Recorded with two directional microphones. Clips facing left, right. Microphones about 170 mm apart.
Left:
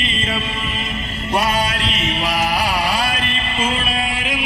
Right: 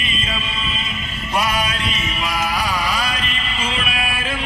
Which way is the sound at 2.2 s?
70° left (ahead or behind).